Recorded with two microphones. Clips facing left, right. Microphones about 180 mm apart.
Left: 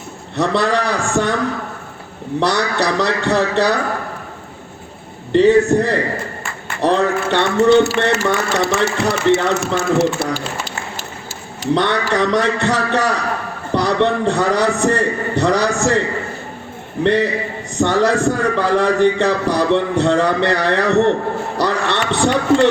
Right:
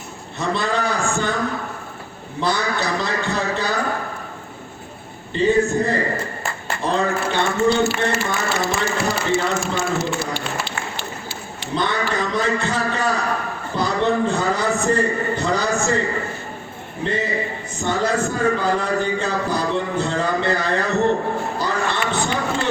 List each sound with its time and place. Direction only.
0.3 s a man's voice: 75° left (ahead or behind)
2.4 s a man's voice: 75° left (ahead or behind)
5.3 s a man's voice: 70° left (ahead or behind)
11.7 s a man's voice: 75° left (ahead or behind)
17.0 s a man's voice: 70° left (ahead or behind)
21.6 s a sound: 75° left (ahead or behind)